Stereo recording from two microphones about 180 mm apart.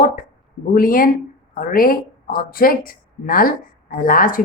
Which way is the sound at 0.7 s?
50° left (ahead or behind).